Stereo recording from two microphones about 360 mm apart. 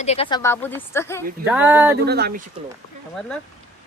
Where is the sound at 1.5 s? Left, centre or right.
Centre.